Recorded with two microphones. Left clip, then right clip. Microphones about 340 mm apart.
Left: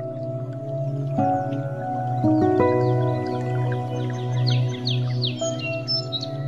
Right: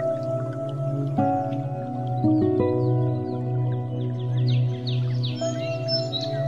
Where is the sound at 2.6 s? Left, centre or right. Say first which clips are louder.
Left 4 dB; left.